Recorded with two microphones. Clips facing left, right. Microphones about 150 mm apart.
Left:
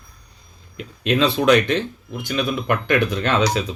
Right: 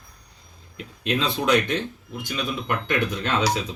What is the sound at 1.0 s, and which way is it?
Speech, 80° left.